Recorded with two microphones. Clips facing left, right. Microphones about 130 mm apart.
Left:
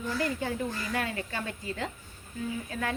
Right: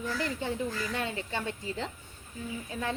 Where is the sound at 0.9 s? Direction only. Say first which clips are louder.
Left 1 dB; 25° right (ahead or behind).